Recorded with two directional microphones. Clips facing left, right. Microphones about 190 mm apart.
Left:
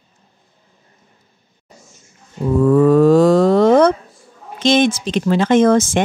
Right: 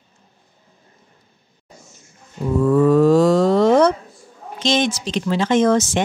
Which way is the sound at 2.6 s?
60° left (ahead or behind).